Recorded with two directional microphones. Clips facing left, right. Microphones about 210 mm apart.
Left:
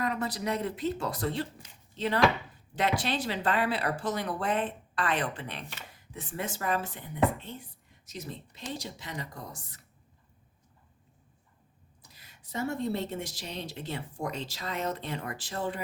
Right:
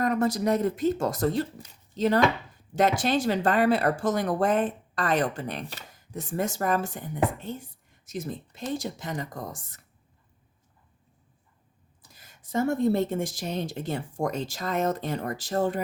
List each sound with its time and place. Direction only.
0.0 s speech: 45° right (ahead or behind)
12.1 s speech: 45° right (ahead or behind)